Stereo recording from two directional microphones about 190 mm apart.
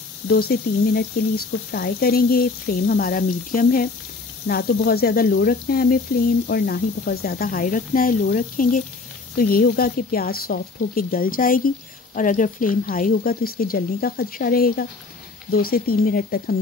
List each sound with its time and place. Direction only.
0.3 s speech: 55° left (ahead or behind)